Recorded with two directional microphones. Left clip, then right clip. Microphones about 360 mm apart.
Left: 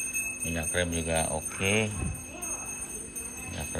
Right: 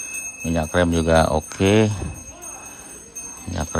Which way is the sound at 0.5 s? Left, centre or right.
Right.